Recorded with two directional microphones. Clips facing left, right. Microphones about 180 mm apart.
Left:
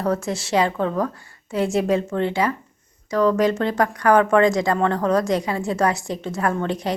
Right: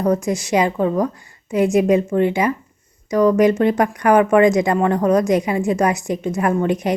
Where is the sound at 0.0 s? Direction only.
15° right (ahead or behind).